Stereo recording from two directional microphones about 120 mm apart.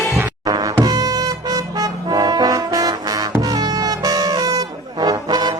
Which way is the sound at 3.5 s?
30° right (ahead or behind).